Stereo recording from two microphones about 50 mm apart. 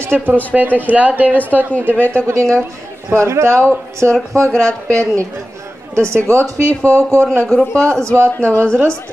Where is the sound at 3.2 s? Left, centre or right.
Right.